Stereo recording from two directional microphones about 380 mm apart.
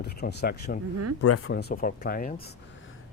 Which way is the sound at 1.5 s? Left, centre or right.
Left.